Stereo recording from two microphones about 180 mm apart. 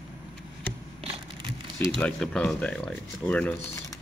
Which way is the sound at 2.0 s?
5° left (ahead or behind).